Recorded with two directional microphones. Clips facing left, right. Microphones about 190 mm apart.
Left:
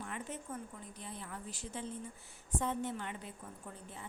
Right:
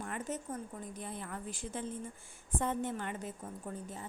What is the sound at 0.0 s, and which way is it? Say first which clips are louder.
Speech: right 4 dB; 45° right (ahead or behind).